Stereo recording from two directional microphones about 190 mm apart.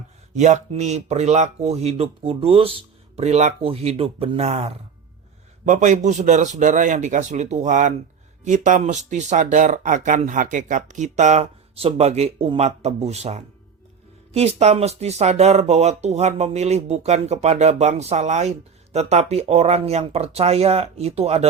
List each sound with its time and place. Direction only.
0.3 s speech: 40° right (ahead or behind)